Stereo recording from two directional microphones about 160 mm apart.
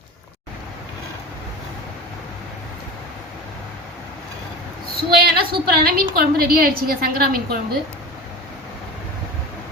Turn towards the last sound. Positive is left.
turn(degrees=-65)  # may be behind; listen again after turning